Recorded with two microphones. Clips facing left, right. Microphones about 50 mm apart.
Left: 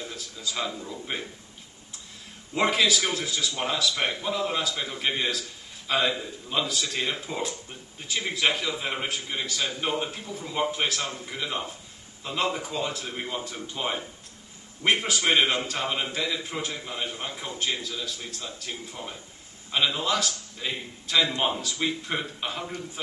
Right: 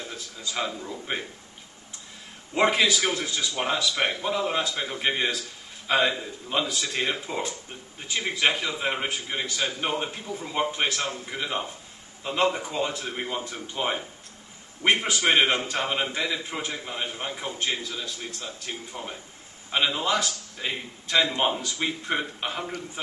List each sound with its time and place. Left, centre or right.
0.6 s a man's voice: centre
2.5 s a man's voice: centre